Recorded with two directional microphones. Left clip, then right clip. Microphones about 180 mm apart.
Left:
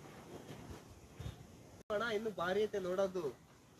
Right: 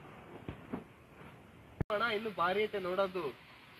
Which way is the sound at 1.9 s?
35° right (ahead or behind).